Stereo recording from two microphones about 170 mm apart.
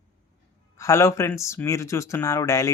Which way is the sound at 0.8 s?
20° left (ahead or behind).